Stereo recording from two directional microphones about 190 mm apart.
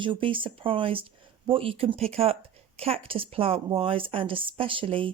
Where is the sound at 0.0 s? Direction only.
25° right (ahead or behind).